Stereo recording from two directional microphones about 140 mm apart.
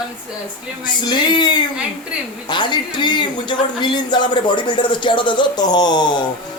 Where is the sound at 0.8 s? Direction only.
30° left (ahead or behind).